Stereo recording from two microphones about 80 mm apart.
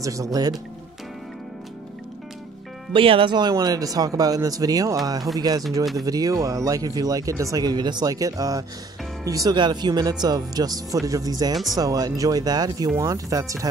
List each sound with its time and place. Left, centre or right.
0.0 s speech: right
2.9 s speech: right
9.6 s speech: right